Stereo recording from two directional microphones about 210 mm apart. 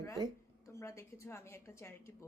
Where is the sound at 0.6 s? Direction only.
15° left (ahead or behind).